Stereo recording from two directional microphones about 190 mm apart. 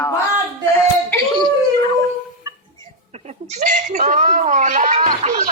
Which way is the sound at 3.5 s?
40° right (ahead or behind).